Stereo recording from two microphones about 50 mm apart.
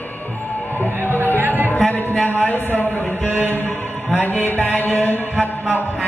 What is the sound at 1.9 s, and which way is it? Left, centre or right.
Speech, left.